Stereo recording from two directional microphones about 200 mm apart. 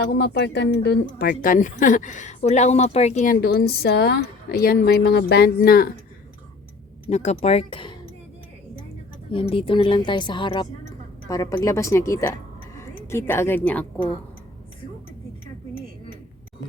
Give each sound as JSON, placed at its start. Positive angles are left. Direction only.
{"t": 0.0, "sound": "speech", "side_deg": 55}
{"t": 3.4, "sound": "speech", "side_deg": 50}
{"t": 7.1, "sound": "speech", "side_deg": 30}
{"t": 9.3, "sound": "a woman's voice", "side_deg": 25}